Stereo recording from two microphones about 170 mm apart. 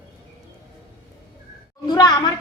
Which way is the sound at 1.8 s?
25° left (ahead or behind).